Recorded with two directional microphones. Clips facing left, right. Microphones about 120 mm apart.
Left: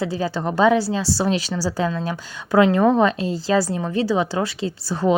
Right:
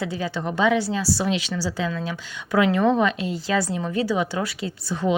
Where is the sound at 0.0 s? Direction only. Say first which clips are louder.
Left 4 dB; 35° left (ahead or behind).